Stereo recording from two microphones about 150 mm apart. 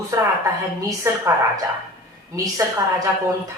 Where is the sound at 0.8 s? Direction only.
20° right (ahead or behind).